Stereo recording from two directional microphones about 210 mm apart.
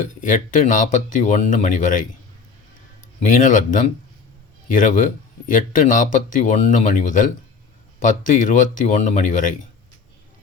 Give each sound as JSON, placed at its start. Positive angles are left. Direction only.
{"t": 0.2, "sound": "speech", "side_deg": 40}
{"t": 3.2, "sound": "speech", "side_deg": 40}